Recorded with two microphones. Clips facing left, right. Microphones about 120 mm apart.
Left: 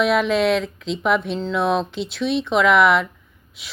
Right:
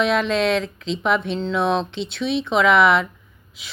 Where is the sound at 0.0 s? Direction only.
5° left (ahead or behind).